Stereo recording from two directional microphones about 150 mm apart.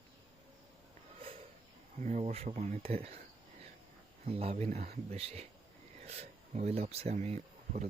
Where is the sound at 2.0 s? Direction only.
55° right (ahead or behind).